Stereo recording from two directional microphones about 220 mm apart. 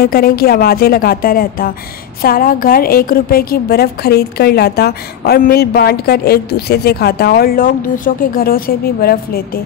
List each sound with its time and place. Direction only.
0.0 s a woman's voice: 45° left (ahead or behind)